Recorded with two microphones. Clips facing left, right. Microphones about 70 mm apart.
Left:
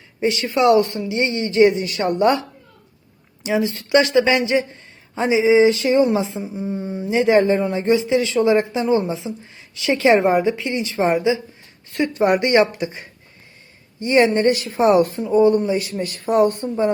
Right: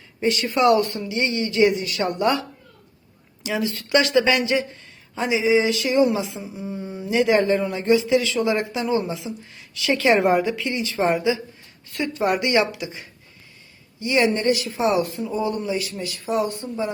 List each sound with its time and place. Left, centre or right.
0.2 s speech: centre
16.0 s speech: left